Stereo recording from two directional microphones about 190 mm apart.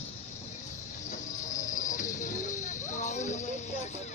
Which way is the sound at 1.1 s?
40° left (ahead or behind).